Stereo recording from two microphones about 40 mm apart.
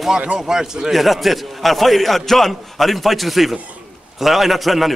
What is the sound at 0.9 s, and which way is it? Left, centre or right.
A man's voice, centre.